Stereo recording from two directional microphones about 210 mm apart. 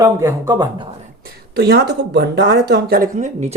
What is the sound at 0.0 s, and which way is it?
Speech, 15° right (ahead or behind).